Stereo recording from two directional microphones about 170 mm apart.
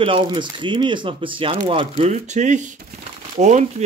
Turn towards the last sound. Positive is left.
turn(degrees=-45)  # may be behind; listen again after turning